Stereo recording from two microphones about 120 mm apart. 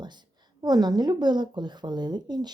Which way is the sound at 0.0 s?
40° right (ahead or behind).